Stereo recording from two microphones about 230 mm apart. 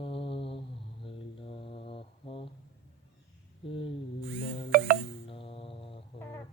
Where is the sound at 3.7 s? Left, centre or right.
Left.